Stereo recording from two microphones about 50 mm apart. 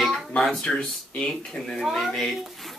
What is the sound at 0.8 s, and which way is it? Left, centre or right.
Speech, centre.